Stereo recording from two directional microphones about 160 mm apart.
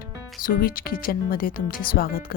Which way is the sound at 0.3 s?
65° left (ahead or behind).